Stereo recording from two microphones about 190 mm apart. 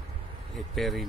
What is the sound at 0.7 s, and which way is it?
Speech, centre (ahead or behind).